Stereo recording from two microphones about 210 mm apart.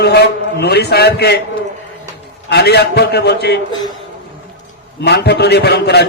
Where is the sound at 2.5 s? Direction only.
50° left (ahead or behind).